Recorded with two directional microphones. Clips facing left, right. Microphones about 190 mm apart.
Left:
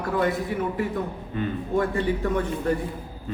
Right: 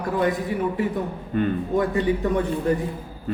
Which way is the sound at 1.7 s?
15° right (ahead or behind).